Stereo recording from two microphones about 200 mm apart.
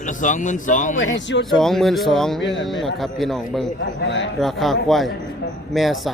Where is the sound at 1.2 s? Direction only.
65° left (ahead or behind).